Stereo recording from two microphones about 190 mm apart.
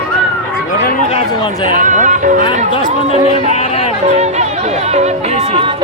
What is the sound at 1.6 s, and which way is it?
Music, 45° right (ahead or behind).